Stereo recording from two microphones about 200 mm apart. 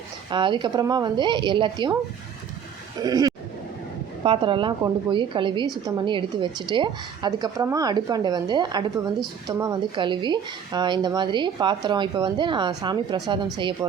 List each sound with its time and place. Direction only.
0.3 s a woman's voice: 25° right (ahead or behind)
3.0 s a woman's voice: 20° right (ahead or behind)